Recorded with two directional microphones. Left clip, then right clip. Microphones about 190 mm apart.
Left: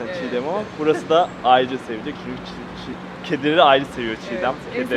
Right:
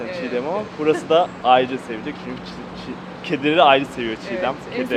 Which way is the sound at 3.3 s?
10° left (ahead or behind).